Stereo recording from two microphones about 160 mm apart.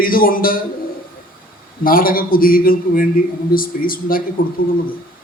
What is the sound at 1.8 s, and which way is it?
Speech, 65° left (ahead or behind).